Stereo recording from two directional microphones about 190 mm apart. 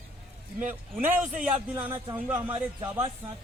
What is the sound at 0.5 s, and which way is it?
Speech, 10° right (ahead or behind).